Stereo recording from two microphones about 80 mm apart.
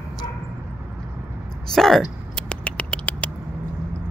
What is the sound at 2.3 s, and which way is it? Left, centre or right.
Patter, centre.